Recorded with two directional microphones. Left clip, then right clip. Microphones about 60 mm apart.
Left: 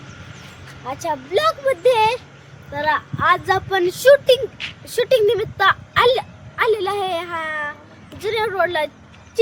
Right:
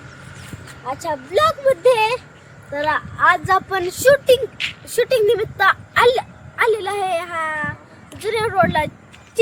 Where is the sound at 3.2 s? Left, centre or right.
Centre.